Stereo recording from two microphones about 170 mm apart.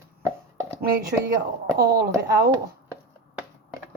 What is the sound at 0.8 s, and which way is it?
Speech, 65° right (ahead or behind).